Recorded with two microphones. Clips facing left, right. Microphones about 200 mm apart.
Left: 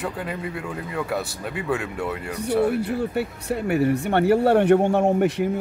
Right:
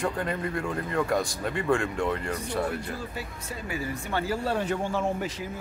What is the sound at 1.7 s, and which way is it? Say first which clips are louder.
A man's voice: right 1 dB; 5° left (ahead or behind).